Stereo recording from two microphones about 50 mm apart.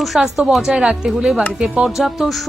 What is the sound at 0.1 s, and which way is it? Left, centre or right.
A woman's voice, right.